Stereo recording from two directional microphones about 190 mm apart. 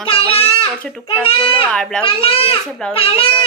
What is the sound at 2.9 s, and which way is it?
Speech, 30° left (ahead or behind).